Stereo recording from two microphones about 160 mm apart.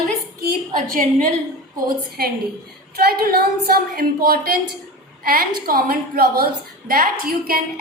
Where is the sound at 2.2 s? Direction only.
70° right (ahead or behind).